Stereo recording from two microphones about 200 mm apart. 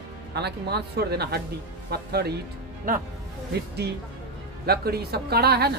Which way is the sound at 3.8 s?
55° right (ahead or behind).